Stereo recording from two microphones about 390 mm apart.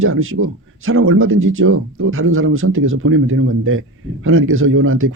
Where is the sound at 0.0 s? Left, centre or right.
Right.